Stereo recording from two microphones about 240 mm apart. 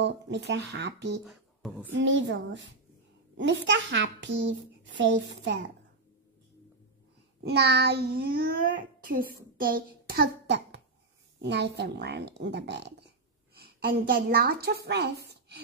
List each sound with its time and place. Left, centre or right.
0.0 s a child's voice: right
1.2 s speech: centre
1.9 s a child's voice: right
7.4 s a child's voice: right